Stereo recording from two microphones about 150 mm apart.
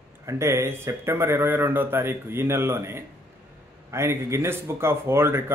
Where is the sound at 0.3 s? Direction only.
20° right (ahead or behind).